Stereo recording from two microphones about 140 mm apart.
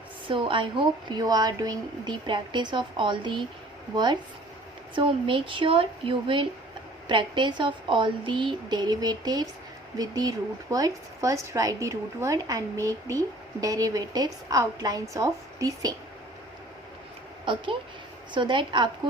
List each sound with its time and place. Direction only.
0.3 s a woman's voice: 35° right (ahead or behind)
17.4 s a woman's voice: 35° right (ahead or behind)